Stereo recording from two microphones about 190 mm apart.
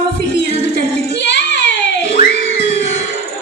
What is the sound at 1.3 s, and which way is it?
Child singing, 70° left (ahead or behind).